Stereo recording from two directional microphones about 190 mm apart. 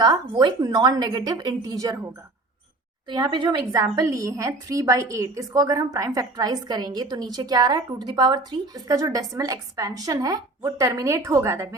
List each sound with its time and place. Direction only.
0.0 s a woman's voice: 20° right (ahead or behind)
3.1 s a woman's voice: 25° right (ahead or behind)